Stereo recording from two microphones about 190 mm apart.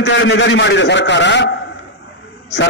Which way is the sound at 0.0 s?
70° left (ahead or behind).